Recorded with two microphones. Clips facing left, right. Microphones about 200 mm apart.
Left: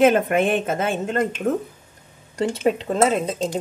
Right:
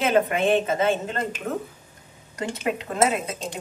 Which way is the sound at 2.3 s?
30° left (ahead or behind).